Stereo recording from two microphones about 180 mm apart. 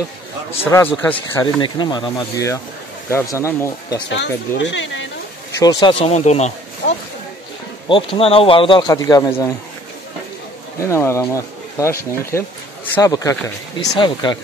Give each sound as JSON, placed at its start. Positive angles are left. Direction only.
{"t": 0.7, "sound": "speech", "side_deg": 15}
{"t": 4.1, "sound": "speech", "side_deg": 80}
{"t": 5.6, "sound": "speech", "side_deg": 20}
{"t": 7.9, "sound": "speech", "side_deg": 30}
{"t": 10.8, "sound": "speech", "side_deg": 15}